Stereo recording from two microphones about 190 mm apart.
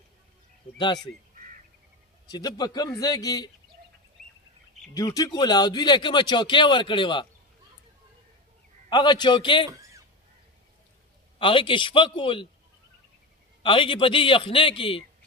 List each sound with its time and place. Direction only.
2.2 s speech: 20° left (ahead or behind)
4.9 s speech: 20° left (ahead or behind)
8.9 s speech: 25° left (ahead or behind)
11.3 s speech: 25° left (ahead or behind)
13.6 s speech: 30° left (ahead or behind)